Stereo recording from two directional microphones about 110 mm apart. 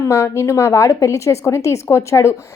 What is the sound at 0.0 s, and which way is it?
A woman's voice, 25° left (ahead or behind).